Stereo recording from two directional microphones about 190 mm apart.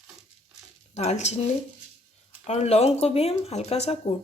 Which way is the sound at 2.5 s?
35° left (ahead or behind).